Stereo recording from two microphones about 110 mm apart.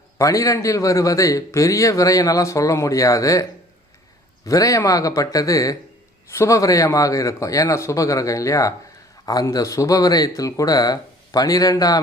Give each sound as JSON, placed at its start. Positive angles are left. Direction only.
{"t": 0.2, "sound": "a man's voice", "side_deg": 30}
{"t": 4.4, "sound": "a man's voice", "side_deg": 30}